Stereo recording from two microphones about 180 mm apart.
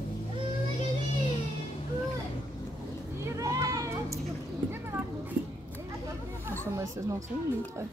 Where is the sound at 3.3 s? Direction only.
20° right (ahead or behind).